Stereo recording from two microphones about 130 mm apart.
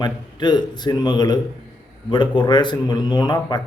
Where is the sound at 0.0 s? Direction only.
35° left (ahead or behind).